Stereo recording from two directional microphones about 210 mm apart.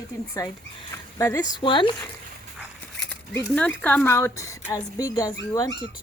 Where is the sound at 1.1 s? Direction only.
15° left (ahead or behind).